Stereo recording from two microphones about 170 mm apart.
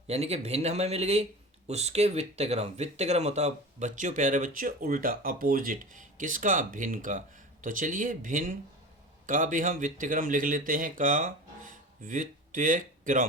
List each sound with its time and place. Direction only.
0.1 s speech: 40° right (ahead or behind)